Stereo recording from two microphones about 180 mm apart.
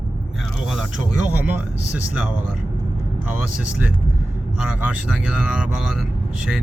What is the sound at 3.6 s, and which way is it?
Speech, 5° right (ahead or behind).